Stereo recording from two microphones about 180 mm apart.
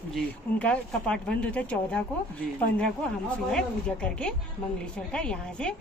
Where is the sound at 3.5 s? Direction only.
5° left (ahead or behind).